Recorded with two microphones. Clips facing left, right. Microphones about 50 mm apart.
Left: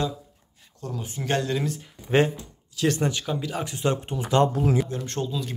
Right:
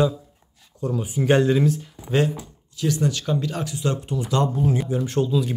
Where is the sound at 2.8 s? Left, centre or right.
Left.